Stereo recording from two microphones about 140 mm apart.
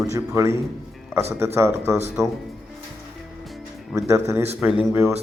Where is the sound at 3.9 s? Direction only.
20° right (ahead or behind).